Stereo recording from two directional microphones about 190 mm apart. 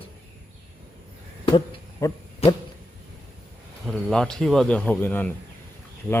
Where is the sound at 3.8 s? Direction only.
5° left (ahead or behind).